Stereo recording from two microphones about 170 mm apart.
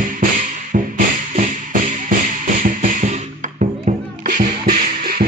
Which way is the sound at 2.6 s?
55° right (ahead or behind).